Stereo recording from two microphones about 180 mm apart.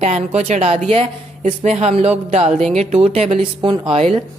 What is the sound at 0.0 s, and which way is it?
Speech, 40° right (ahead or behind).